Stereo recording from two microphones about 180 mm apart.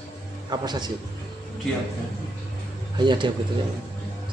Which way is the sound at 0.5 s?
25° right (ahead or behind).